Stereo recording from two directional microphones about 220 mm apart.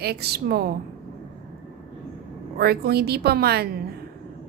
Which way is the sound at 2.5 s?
45° right (ahead or behind).